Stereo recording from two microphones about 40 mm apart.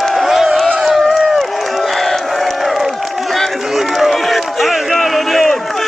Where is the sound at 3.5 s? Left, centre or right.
Centre.